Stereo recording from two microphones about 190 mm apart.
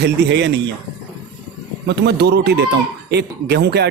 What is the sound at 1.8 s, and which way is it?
Speech, 60° right (ahead or behind).